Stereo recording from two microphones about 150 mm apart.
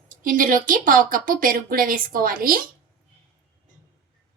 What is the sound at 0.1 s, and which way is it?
Speech, 65° right (ahead or behind).